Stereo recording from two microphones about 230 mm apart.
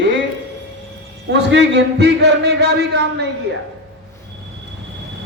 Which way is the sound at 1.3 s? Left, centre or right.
Right.